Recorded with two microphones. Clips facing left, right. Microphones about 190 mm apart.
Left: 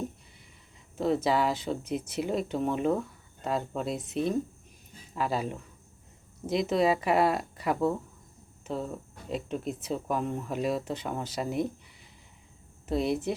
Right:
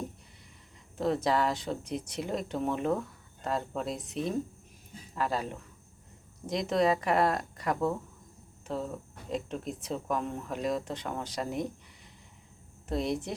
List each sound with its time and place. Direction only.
0.9 s speech: centre (ahead or behind)
6.5 s speech: 5° left (ahead or behind)
12.9 s speech: 5° left (ahead or behind)